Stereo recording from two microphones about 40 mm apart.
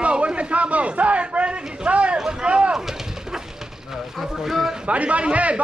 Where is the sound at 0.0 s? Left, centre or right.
Right.